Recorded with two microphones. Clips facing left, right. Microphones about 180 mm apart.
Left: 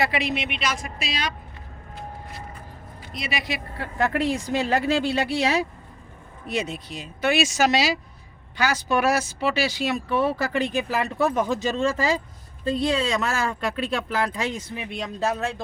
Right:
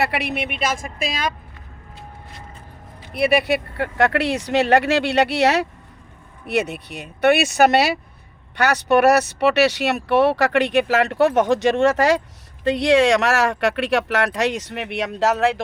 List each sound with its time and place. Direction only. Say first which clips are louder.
0.0 s speech: right 2 dB; 65° right (ahead or behind)
3.2 s speech: right 12 dB; 60° right (ahead or behind); by 15.6 s 80° right